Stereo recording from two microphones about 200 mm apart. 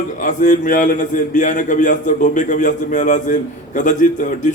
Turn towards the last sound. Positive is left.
turn(degrees=40)  # may be behind; listen again after turning